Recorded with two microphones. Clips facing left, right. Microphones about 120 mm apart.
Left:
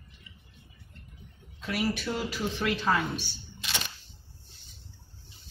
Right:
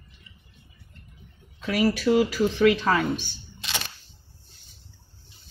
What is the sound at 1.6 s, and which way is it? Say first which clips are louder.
Speech: right 8 dB; 85° right.